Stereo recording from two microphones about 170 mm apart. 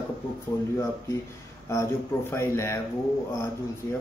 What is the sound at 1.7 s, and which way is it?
Speech, 15° left (ahead or behind).